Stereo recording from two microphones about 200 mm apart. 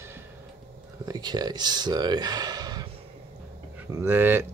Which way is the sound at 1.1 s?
20° right (ahead or behind).